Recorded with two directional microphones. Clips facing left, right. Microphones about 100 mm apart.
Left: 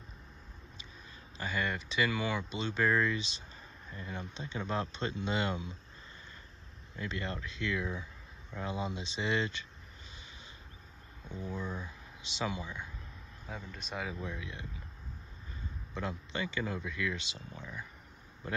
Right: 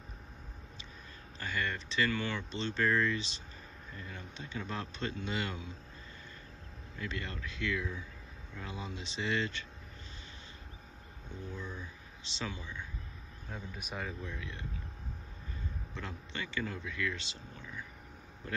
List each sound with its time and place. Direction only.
1.4 s speech: 15° left (ahead or behind)
7.0 s speech: 20° left (ahead or behind)
11.4 s speech: 15° left (ahead or behind)
13.6 s speech: 10° right (ahead or behind)
14.2 s speech: 15° left (ahead or behind)
15.9 s a man's voice: 15° left (ahead or behind)